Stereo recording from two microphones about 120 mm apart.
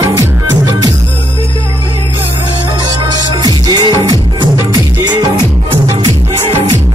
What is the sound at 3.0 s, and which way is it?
Music, 35° right (ahead or behind).